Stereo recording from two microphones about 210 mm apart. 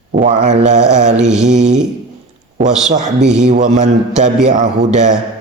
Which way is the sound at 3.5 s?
35° right (ahead or behind).